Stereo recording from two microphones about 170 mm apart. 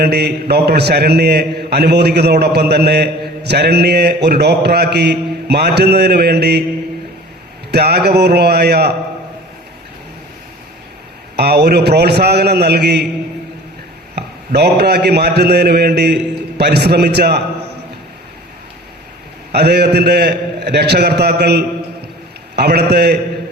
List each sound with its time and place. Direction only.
0.0 s a man's voice: 75° right (ahead or behind)
7.7 s a man's voice: 70° right (ahead or behind)
11.3 s a man's voice: 75° right (ahead or behind)
14.2 s a man's voice: 70° right (ahead or behind)
19.5 s a man's voice: 75° right (ahead or behind)